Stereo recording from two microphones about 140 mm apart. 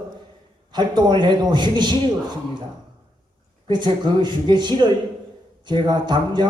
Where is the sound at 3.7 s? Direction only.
30° right (ahead or behind).